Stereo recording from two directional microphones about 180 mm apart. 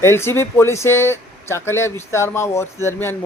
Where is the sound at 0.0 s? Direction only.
15° left (ahead or behind).